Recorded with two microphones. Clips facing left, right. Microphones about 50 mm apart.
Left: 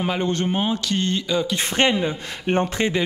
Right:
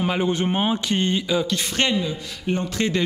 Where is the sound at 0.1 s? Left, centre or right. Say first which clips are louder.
Right 1 dB; centre.